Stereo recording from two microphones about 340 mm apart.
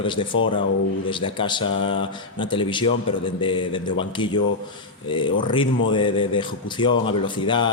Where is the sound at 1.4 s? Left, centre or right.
Centre.